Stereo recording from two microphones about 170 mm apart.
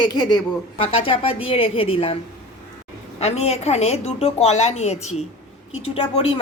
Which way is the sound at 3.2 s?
40° left (ahead or behind).